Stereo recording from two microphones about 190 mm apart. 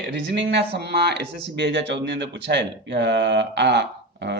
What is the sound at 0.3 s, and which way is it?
Speech, 65° right (ahead or behind).